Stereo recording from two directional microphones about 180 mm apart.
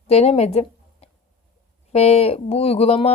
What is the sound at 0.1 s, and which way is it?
Speech, 35° left (ahead or behind).